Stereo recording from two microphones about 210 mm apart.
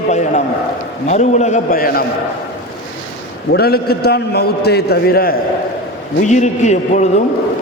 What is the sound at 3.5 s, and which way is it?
A man's voice, 50° left (ahead or behind).